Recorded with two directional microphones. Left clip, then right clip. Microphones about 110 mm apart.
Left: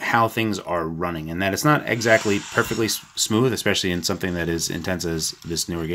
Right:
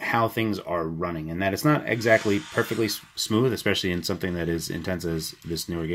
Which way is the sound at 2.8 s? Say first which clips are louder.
Left 4 dB; 20° left (ahead or behind).